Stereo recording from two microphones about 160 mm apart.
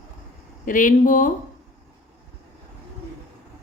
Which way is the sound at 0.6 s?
55° left (ahead or behind).